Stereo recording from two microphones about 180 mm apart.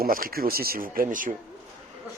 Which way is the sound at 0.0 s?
55° right (ahead or behind).